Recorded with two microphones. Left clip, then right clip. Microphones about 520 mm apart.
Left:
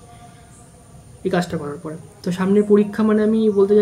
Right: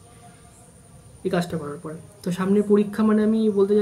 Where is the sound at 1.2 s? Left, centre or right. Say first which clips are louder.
Left 4 dB; right.